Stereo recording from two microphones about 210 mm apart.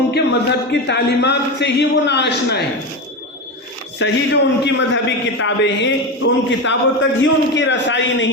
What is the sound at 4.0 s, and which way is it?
A man's voice, 55° left (ahead or behind).